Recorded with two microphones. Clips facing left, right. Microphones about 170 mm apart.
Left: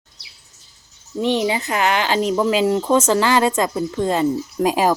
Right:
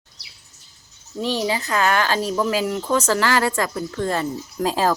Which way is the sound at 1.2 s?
20° left (ahead or behind).